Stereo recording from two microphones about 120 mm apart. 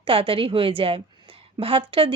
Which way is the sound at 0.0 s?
50° right (ahead or behind).